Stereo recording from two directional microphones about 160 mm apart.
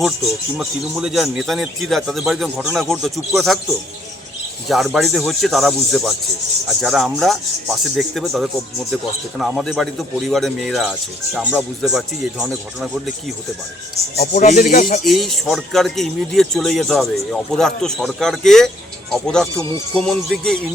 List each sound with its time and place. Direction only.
0.5 s speech: 5° right (ahead or behind)
4.7 s speech: centre (ahead or behind)
14.3 s speech: 50° left (ahead or behind)
15.0 s speech: centre (ahead or behind)